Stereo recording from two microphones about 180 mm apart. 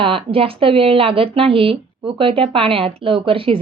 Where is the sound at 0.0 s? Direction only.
30° right (ahead or behind).